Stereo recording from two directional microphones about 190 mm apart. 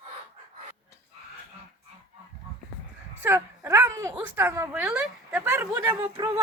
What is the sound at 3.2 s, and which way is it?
Speech, 10° right (ahead or behind).